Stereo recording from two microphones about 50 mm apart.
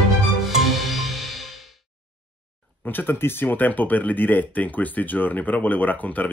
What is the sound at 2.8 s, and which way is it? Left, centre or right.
Speech, left.